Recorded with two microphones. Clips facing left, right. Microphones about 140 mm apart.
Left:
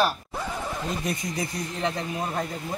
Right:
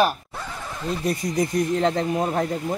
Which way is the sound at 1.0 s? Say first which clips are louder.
Right 6 dB; 40° right (ahead or behind).